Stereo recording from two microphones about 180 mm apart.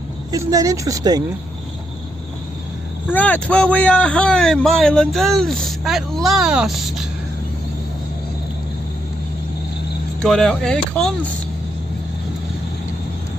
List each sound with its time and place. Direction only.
0.3 s speech: 20° right (ahead or behind)
3.1 s a man's voice: 10° left (ahead or behind)
10.2 s a man's voice: 5° left (ahead or behind)